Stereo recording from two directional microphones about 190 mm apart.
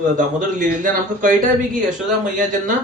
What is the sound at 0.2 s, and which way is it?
Speech, 45° right (ahead or behind).